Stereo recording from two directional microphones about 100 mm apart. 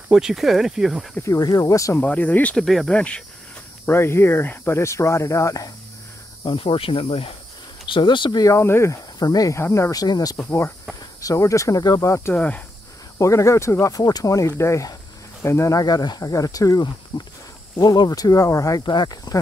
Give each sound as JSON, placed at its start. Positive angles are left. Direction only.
{"t": 0.1, "sound": "speech", "side_deg": -5}
{"t": 1.2, "sound": "speech", "side_deg": 40}
{"t": 2.0, "sound": "speech", "side_deg": 15}
{"t": 2.6, "sound": "speech", "side_deg": 0}
{"t": 3.8, "sound": "speech", "side_deg": 25}
{"t": 6.4, "sound": "speech", "side_deg": 60}
{"t": 7.9, "sound": "speech", "side_deg": 55}
{"t": 8.5, "sound": "speech", "side_deg": 25}
{"t": 9.6, "sound": "speech", "side_deg": 30}
{"t": 12.4, "sound": "speech", "side_deg": 15}
{"t": 13.2, "sound": "speech", "side_deg": 30}
{"t": 15.8, "sound": "speech", "side_deg": 40}
{"t": 17.1, "sound": "speech", "side_deg": 55}
{"t": 17.7, "sound": "speech", "side_deg": 40}